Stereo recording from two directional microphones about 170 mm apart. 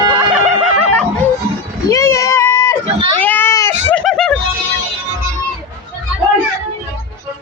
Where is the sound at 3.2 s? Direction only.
10° left (ahead or behind).